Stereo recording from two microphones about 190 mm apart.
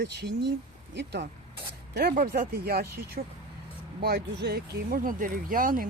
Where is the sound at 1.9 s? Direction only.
55° right (ahead or behind).